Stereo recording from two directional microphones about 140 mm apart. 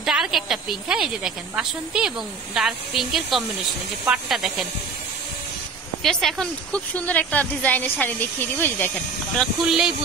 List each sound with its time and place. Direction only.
0.0 s speech: 5° right (ahead or behind)
6.0 s a woman's voice: 5° left (ahead or behind)
9.4 s speech: 5° right (ahead or behind)